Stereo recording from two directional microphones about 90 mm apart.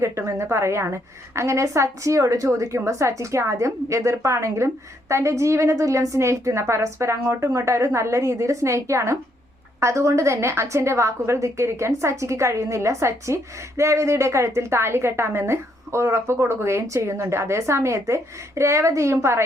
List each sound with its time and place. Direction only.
0.0 s a woman's voice: 35° right (ahead or behind)